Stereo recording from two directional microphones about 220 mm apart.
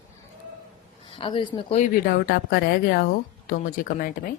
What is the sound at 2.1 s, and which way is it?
A woman's voice, 45° left (ahead or behind).